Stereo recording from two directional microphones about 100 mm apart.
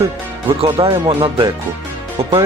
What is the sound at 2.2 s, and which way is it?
Speech, 75° right (ahead or behind).